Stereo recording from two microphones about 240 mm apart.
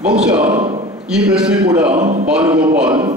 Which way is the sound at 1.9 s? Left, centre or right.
Right.